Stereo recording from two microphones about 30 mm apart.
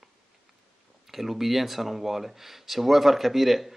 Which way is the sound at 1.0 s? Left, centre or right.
Centre.